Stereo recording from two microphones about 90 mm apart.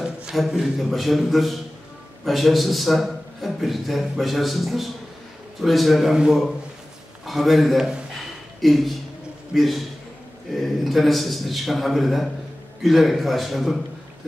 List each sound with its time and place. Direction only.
0.0 s a man's voice: 5° right (ahead or behind)